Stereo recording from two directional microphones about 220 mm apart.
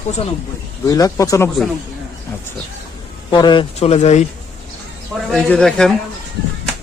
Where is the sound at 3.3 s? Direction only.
20° left (ahead or behind).